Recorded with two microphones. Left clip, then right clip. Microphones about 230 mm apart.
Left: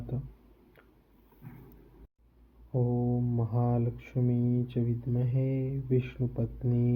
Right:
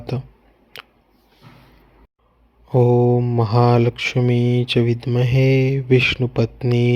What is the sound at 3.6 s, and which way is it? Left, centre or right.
Speech, right.